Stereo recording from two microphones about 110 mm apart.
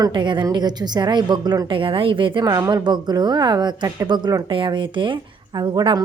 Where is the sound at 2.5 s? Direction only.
35° right (ahead or behind).